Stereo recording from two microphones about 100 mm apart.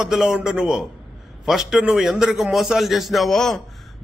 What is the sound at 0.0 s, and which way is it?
A man's voice, 5° right (ahead or behind).